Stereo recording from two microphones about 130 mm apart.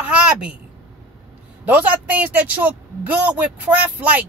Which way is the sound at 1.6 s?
10° right (ahead or behind).